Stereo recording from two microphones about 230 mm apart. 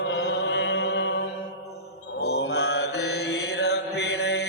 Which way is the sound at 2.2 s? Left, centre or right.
Left.